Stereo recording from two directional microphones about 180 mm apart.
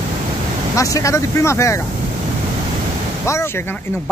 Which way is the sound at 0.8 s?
15° left (ahead or behind).